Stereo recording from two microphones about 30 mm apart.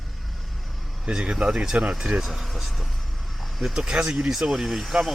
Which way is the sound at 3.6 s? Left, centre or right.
Centre.